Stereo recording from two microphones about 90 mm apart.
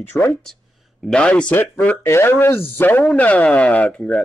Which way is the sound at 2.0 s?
30° left (ahead or behind).